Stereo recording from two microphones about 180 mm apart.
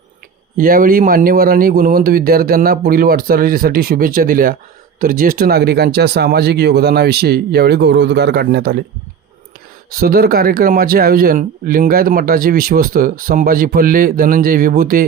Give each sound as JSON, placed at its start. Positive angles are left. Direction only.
{"t": 0.5, "sound": "speech", "side_deg": -50}
{"t": 9.9, "sound": "speech", "side_deg": -55}